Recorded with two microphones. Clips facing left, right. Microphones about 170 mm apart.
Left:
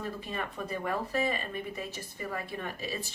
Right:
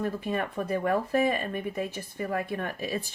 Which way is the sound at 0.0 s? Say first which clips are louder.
Right 7 dB; 55° right (ahead or behind).